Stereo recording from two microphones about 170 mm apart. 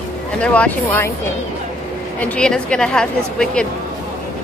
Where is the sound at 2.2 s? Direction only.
5° left (ahead or behind).